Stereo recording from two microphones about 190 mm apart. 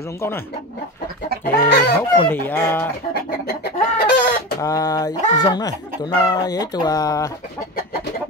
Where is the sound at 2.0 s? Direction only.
10° left (ahead or behind).